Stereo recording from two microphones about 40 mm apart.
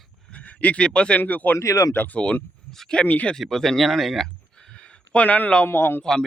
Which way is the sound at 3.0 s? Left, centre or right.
Left.